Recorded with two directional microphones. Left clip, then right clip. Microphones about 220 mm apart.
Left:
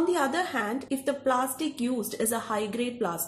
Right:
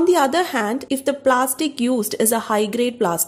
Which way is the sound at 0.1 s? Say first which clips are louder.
Right 10 dB; 45° right (ahead or behind).